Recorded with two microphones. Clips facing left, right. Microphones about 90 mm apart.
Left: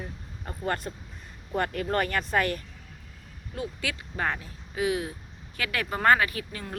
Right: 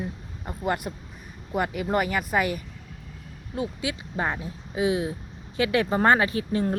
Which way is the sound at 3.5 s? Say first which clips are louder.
Right 4 dB; 20° right (ahead or behind).